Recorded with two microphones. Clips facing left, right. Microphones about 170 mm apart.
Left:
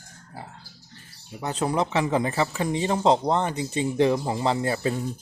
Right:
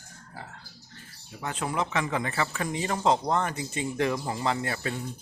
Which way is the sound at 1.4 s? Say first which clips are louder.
Left 5 dB; 35° left (ahead or behind).